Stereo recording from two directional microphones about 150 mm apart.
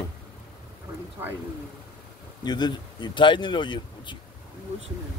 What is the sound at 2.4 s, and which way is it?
Speech, 30° left (ahead or behind).